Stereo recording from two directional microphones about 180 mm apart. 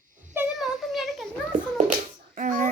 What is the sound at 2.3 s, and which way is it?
Speech, 45° right (ahead or behind).